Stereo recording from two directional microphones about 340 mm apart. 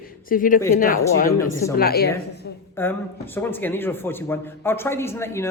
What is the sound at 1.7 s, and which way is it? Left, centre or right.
Speech, left.